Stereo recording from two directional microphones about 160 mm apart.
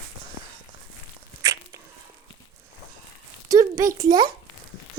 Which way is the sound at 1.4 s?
20° right (ahead or behind).